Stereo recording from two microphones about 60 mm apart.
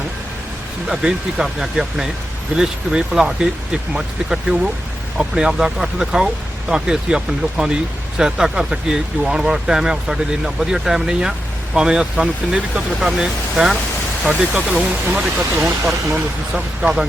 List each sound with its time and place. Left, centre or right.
0.9 s speech: centre
14.3 s speech: right
15.4 s speech: right
16.6 s speech: right